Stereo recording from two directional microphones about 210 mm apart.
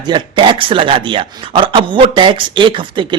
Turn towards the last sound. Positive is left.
turn(degrees=-25)  # may be behind; listen again after turning